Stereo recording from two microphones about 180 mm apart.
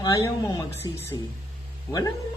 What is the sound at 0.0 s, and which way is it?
A man's voice, 20° left (ahead or behind).